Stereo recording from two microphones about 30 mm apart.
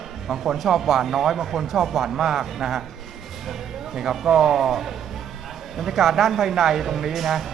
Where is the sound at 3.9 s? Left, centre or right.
Centre.